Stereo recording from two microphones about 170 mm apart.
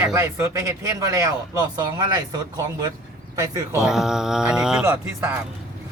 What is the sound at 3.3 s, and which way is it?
Speech, 20° right (ahead or behind).